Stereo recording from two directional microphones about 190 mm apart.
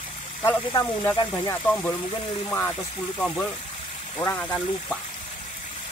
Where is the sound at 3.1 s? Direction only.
10° left (ahead or behind).